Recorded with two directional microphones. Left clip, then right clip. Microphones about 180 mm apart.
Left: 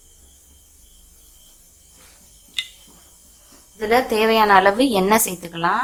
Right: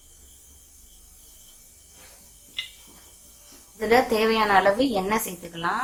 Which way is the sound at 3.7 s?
10° left (ahead or behind).